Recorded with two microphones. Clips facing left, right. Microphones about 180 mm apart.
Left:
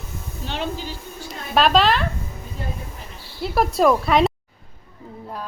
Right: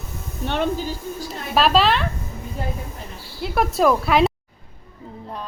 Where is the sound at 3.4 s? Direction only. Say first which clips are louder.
Left 1 dB; centre (ahead or behind).